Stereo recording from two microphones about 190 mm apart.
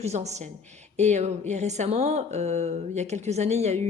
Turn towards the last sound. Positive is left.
turn(degrees=-35)  # may be behind; listen again after turning